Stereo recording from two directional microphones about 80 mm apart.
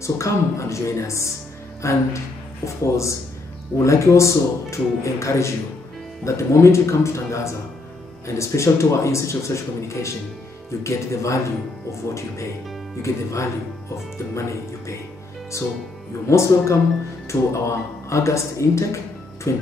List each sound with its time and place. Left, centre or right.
0.0 s speech: left
16.3 s speech: left